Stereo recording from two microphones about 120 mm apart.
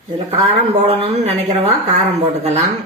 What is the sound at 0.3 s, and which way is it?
A woman's voice, 55° right (ahead or behind).